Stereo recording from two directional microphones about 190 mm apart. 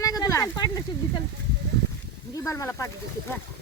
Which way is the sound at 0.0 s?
20° left (ahead or behind).